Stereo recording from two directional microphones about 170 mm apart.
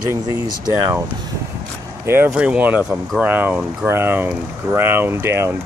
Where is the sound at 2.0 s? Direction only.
10° right (ahead or behind).